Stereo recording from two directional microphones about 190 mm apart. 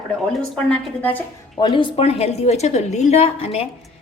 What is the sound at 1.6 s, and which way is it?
A woman's voice, 25° left (ahead or behind).